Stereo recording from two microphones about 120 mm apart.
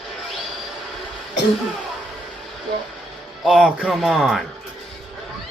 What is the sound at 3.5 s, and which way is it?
Speech, 10° right (ahead or behind).